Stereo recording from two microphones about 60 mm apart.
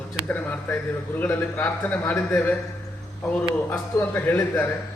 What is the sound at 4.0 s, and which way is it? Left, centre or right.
Speech, left.